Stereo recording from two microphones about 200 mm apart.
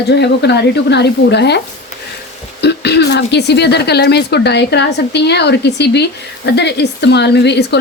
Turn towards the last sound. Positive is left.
turn(degrees=55)  # may be behind; listen again after turning